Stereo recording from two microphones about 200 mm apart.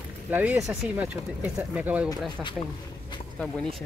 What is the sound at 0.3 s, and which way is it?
Speech, 10° right (ahead or behind).